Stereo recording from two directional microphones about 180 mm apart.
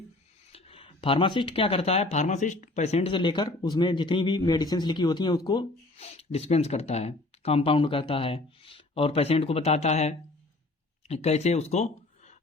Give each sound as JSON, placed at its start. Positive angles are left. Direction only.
{"t": 0.5, "sound": "speech", "side_deg": 30}
{"t": 6.0, "sound": "speech", "side_deg": 35}